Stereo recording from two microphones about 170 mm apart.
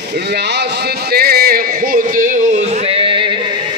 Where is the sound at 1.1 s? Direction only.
65° right (ahead or behind); by 2.6 s 50° right (ahead or behind).